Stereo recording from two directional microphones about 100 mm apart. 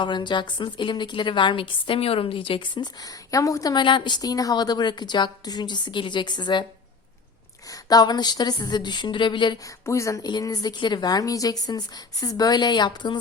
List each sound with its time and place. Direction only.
0.0 s a woman's voice: 50° left (ahead or behind)
3.0 s a woman's voice: 35° left (ahead or behind)
7.7 s a woman's voice: 40° left (ahead or behind)
9.8 s a woman's voice: 30° left (ahead or behind)
10.2 s a woman's voice: 40° left (ahead or behind)